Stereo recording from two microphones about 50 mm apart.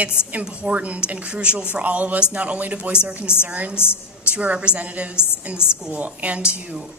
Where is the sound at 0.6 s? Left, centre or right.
Right.